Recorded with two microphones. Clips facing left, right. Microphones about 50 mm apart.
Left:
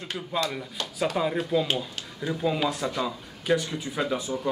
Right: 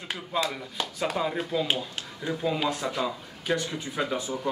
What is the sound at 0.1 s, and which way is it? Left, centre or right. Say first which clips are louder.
Speech: even; centre.